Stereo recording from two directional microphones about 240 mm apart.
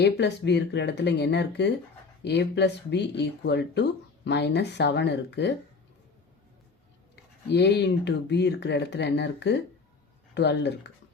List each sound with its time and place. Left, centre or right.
0.0 s speech: left
7.4 s speech: left